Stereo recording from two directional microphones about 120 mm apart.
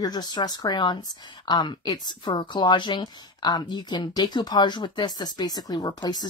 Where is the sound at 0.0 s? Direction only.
35° left (ahead or behind).